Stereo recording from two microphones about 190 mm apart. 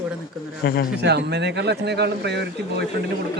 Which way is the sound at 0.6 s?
50° left (ahead or behind).